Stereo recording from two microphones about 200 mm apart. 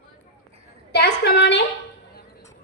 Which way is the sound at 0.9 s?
55° left (ahead or behind).